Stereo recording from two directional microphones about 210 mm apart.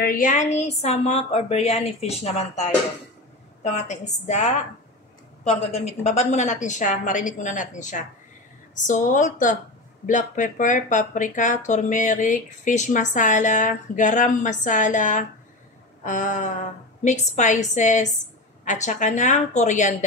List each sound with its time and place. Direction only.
0.0 s speech: 40° left (ahead or behind)